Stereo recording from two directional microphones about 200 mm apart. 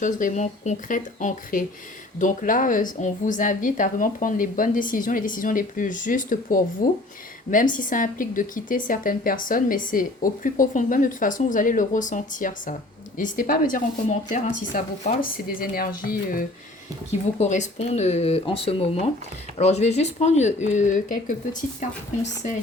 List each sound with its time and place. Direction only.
0.0 s a woman's voice: 40° left (ahead or behind)